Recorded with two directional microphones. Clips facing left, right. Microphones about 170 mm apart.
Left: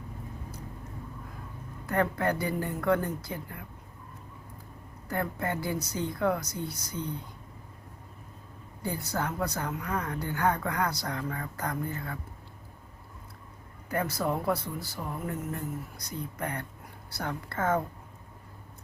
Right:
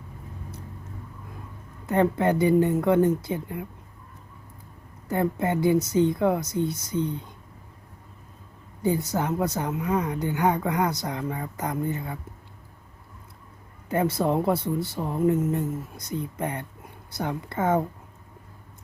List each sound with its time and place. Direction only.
1.9 s speech: 20° right (ahead or behind)
5.0 s speech: 20° right (ahead or behind)
8.8 s speech: 20° right (ahead or behind)
13.9 s speech: 25° right (ahead or behind)